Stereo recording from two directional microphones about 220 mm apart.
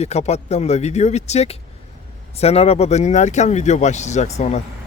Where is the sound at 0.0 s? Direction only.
30° left (ahead or behind).